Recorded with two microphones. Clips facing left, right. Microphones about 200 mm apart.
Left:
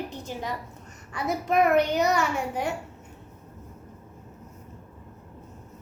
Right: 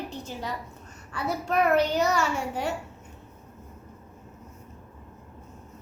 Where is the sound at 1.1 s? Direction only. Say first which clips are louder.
Left 2 dB; 15° left (ahead or behind).